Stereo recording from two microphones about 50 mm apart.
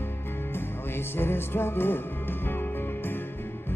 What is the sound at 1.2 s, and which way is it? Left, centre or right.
Music, left.